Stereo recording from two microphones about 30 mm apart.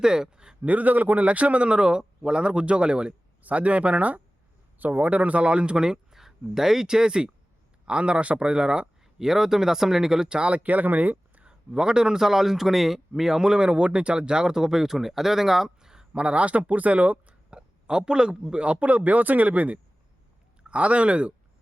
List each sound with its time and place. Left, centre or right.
0.0 s a sound: right
0.6 s a man's voice: right
3.4 s speech: right
6.1 s a man's voice: centre; by 8.9 s right
9.1 s speech: centre
10.2 s a man's voice: right
10.5 s speech: right
11.7 s a man's voice: right
12.2 s speech: centre
16.1 s speech: right
17.5 s a sound: right
18.5 s speech: right
18.9 s speech: right
20.7 s speech: right